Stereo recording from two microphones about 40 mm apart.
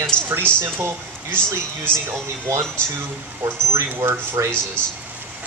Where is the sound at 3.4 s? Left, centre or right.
Right.